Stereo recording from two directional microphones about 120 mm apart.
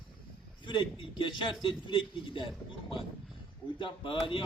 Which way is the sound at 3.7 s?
45° left (ahead or behind).